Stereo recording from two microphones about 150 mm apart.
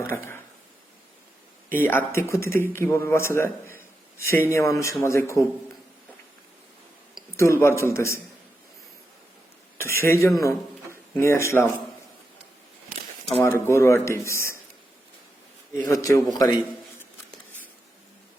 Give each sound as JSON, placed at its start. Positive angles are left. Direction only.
{"t": 0.0, "sound": "a sound", "side_deg": 15}
{"t": 1.7, "sound": "speech", "side_deg": 15}
{"t": 7.3, "sound": "a man's voice", "side_deg": 20}
{"t": 9.7, "sound": "a man's voice", "side_deg": 15}
{"t": 13.4, "sound": "a man's voice", "side_deg": 15}
{"t": 15.9, "sound": "a man's voice", "side_deg": 20}